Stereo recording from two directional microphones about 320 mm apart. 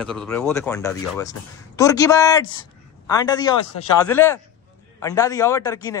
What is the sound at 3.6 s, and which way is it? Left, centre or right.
Speech, left.